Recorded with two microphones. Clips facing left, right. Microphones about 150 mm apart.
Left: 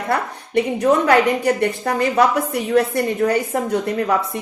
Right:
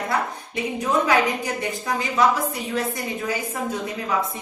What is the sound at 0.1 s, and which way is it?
A woman's voice, 65° left (ahead or behind).